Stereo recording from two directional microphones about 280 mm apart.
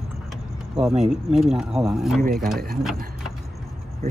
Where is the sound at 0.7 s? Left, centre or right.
Centre.